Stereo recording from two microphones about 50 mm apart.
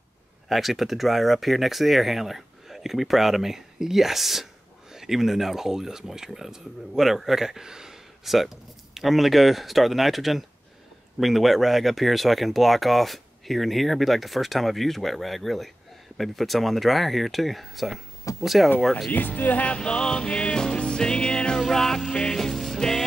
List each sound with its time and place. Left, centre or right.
0.5 s speech: centre
19.0 s music: left; by 23.0 s centre